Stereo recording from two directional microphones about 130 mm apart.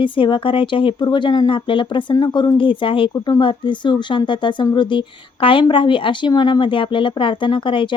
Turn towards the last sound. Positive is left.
turn(degrees=40)  # may be behind; listen again after turning